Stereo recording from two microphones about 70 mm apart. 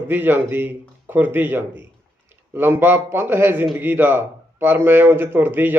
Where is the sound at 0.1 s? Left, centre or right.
Right.